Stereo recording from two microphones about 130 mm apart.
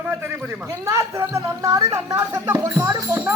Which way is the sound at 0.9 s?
25° right (ahead or behind).